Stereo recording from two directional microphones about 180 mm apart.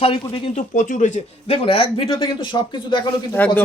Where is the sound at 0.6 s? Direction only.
45° left (ahead or behind); by 3.0 s 25° left (ahead or behind).